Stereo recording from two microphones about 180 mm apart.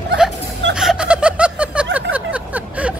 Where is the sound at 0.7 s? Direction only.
5° right (ahead or behind).